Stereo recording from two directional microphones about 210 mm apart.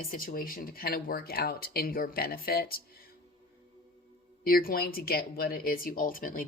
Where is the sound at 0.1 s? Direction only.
45° left (ahead or behind).